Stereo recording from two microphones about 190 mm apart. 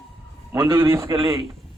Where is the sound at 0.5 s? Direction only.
20° right (ahead or behind).